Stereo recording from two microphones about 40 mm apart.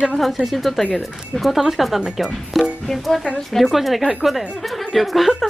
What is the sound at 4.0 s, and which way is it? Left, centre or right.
Speech, centre.